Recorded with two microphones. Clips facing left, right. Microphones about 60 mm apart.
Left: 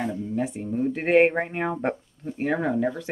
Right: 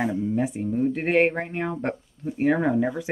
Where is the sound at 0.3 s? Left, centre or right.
Centre.